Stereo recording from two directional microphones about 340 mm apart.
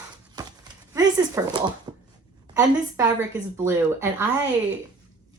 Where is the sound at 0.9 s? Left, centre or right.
Centre.